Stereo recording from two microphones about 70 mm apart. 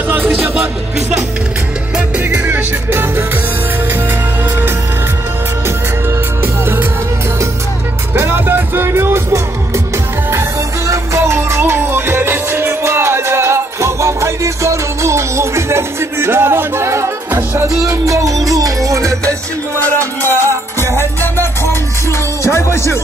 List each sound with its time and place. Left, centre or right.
0.1 s music: right
2.0 s music: right
6.4 s music: right
8.1 s music: right
11.1 s music: right
20.9 s music: left
22.5 s music: left